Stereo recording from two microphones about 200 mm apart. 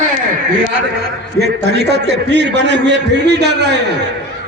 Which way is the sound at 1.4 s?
55° right (ahead or behind).